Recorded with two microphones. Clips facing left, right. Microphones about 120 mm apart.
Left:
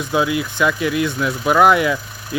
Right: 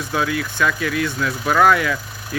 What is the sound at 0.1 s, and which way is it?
Speech, 15° left (ahead or behind).